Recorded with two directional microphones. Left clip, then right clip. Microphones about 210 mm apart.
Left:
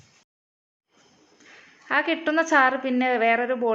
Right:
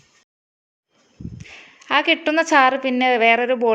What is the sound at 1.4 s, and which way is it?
A woman's voice, 30° right (ahead or behind).